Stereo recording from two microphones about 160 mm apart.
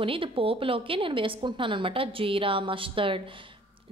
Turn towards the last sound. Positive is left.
turn(degrees=-35)  # may be behind; listen again after turning